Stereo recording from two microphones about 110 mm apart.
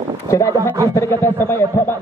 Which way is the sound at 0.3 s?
30° left (ahead or behind).